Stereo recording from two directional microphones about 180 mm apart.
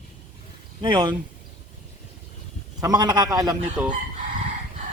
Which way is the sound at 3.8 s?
5° right (ahead or behind).